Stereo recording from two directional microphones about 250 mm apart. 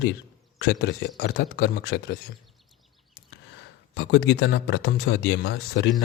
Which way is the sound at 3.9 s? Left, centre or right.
Left.